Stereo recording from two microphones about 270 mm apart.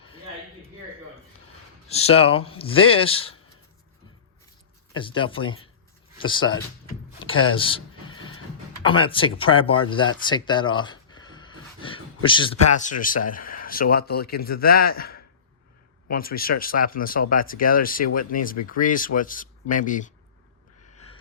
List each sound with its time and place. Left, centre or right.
1.9 s speech: left
4.9 s speech: centre
7.3 s a sound: centre
8.8 s speech: centre